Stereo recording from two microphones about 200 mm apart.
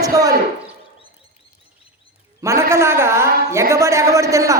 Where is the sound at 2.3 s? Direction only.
15° right (ahead or behind).